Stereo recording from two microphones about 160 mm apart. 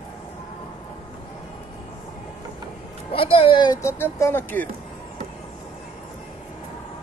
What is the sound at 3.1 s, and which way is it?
Speech, 35° left (ahead or behind).